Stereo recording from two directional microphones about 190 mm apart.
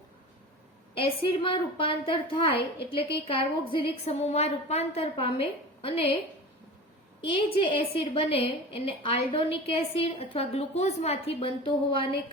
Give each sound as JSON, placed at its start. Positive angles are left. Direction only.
{"t": 0.9, "sound": "a woman's voice", "side_deg": 30}
{"t": 7.2, "sound": "a woman's voice", "side_deg": 30}